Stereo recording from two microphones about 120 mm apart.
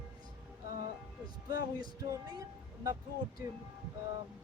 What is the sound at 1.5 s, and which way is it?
Music, 35° right (ahead or behind).